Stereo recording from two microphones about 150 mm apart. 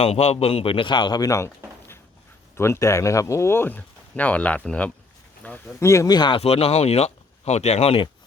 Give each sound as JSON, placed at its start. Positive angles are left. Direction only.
{"t": 0.0, "sound": "speech", "side_deg": 45}
{"t": 2.6, "sound": "speech", "side_deg": 20}
{"t": 6.4, "sound": "speech", "side_deg": 45}